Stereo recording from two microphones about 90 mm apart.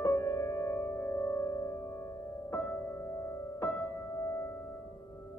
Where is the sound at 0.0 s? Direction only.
35° left (ahead or behind).